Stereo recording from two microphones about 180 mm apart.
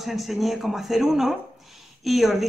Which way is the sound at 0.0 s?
Centre (ahead or behind).